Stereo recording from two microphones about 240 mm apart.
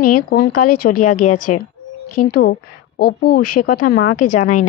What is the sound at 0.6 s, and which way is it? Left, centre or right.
Speech, left.